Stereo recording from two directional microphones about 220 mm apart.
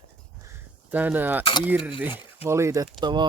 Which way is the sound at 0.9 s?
10° right (ahead or behind).